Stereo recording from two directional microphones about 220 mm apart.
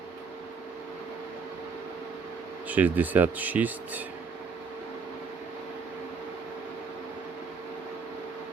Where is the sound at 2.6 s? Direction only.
10° right (ahead or behind).